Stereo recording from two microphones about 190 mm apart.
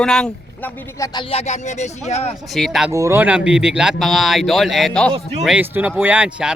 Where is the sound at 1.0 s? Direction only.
25° left (ahead or behind).